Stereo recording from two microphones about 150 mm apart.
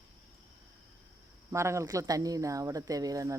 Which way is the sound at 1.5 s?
20° right (ahead or behind).